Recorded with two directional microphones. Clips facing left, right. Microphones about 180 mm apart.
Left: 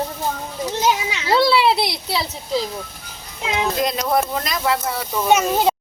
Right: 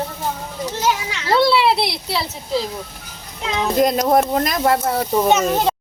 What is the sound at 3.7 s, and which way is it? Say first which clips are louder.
Speech: right 8 dB; 45° right (ahead or behind).